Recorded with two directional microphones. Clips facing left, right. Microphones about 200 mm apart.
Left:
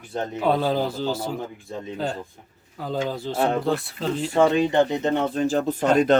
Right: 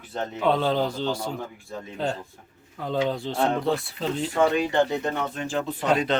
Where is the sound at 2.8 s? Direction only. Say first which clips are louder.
Right 1 dB; 5° left (ahead or behind).